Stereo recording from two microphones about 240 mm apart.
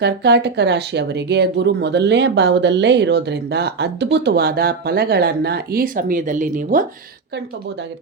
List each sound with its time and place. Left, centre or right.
0.0 s speech: right